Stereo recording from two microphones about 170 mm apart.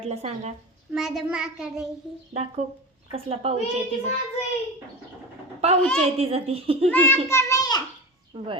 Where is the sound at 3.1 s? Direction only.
35° right (ahead or behind).